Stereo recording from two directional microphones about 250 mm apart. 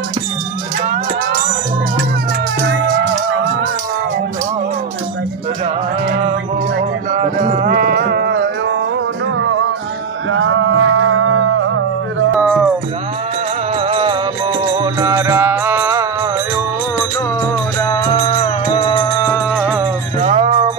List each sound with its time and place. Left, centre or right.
7.1 s music: right
10.3 s music: right
12.4 s music: centre
13.7 s music: right
17.7 s music: centre
19.6 s music: centre
20.2 s music: right